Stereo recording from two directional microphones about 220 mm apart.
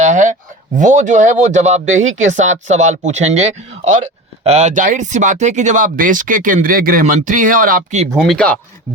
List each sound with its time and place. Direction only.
0.0 s a man's voice: 35° right (ahead or behind)
8.1 s speech: centre (ahead or behind)